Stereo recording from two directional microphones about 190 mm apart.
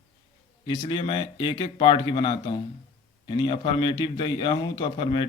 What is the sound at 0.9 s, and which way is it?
A man's voice, 25° left (ahead or behind).